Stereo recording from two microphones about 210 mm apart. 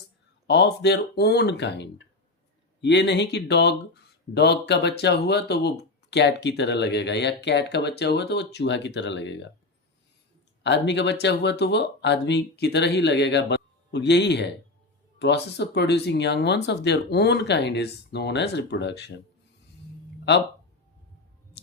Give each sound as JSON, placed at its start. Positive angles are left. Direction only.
{"t": 0.4, "sound": "speech", "side_deg": 55}
{"t": 10.6, "sound": "speech", "side_deg": 55}